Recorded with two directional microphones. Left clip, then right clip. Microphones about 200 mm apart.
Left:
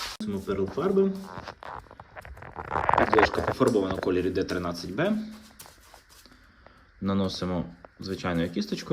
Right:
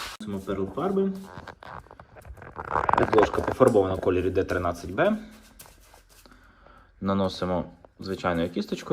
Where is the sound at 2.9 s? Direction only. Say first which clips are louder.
Even; 20° right (ahead or behind).